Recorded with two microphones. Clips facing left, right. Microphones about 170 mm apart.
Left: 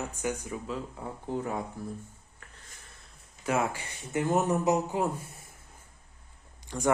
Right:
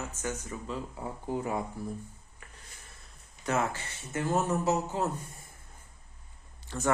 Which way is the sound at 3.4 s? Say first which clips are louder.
Left 1 dB; 10° left (ahead or behind).